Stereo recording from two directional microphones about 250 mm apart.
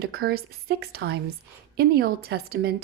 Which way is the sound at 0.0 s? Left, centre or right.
Right.